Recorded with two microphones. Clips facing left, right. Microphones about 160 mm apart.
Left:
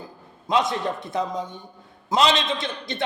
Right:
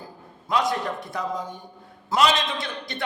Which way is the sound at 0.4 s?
20° left (ahead or behind).